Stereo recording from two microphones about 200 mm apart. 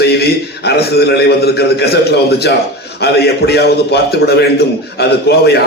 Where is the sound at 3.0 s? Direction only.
55° left (ahead or behind).